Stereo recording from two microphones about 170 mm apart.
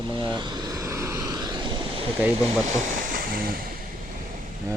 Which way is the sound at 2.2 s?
5° right (ahead or behind).